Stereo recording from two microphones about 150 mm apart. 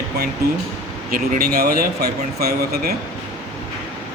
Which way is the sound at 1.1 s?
80° right.